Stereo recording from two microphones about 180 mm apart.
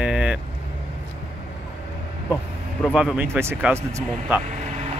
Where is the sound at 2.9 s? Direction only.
5° right (ahead or behind).